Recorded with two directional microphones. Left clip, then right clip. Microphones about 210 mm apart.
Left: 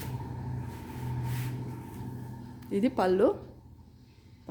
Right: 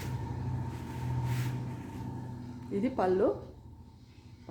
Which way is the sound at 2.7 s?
45° left (ahead or behind).